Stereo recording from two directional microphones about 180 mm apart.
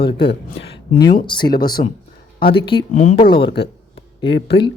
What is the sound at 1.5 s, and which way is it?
Speech, 55° left (ahead or behind).